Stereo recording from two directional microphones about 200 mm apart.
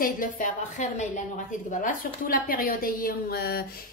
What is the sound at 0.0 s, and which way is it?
A woman's voice, 40° left (ahead or behind).